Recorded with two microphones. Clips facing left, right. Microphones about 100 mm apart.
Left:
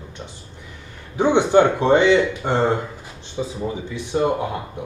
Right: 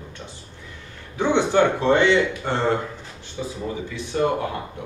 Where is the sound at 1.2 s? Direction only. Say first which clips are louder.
Left 3 dB; 15° left (ahead or behind).